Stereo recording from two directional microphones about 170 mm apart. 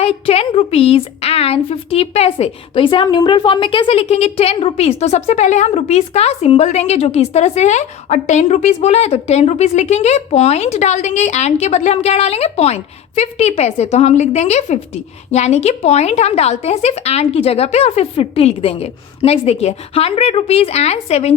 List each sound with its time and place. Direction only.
0.0 s a woman's voice: 35° left (ahead or behind)